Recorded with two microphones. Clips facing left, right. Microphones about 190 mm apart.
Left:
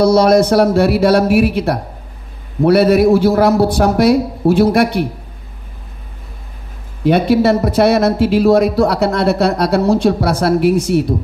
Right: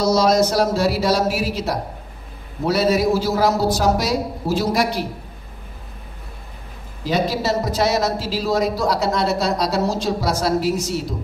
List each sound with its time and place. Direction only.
0.0 s a man's voice: 60° left (ahead or behind)
7.1 s a man's voice: 60° left (ahead or behind)